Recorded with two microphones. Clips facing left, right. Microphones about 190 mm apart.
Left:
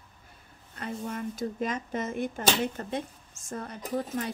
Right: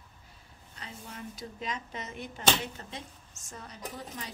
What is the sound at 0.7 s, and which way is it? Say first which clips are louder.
Speech: left 11 dB; 55° left (ahead or behind).